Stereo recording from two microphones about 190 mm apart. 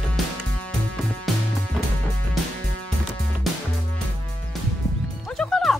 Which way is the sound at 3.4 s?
Centre (ahead or behind).